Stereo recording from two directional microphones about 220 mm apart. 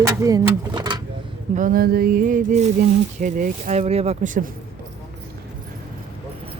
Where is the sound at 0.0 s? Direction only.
15° right (ahead or behind).